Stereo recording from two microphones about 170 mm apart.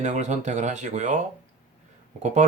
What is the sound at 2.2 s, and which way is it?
Speech, 45° right (ahead or behind).